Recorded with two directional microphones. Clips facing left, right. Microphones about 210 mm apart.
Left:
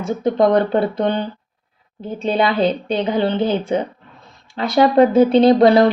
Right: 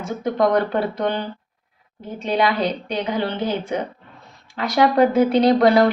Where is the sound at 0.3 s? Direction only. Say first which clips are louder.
Left 3 dB; 25° left (ahead or behind).